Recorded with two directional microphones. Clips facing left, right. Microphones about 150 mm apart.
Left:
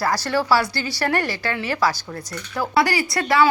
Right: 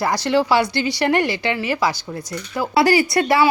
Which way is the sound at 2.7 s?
25° right (ahead or behind).